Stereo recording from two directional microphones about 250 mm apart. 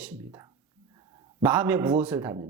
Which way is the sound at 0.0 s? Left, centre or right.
Centre.